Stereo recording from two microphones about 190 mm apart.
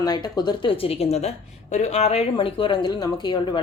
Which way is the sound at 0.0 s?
20° left (ahead or behind).